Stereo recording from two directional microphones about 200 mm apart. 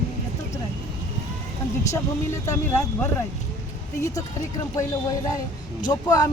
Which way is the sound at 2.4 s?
10° left (ahead or behind).